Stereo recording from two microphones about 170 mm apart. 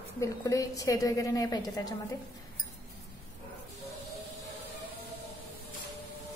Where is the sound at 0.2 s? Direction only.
20° left (ahead or behind).